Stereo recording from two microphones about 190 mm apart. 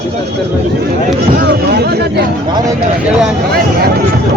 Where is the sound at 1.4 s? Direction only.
60° right (ahead or behind).